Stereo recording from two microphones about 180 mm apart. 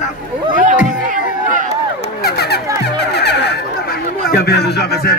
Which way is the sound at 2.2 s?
60° left (ahead or behind).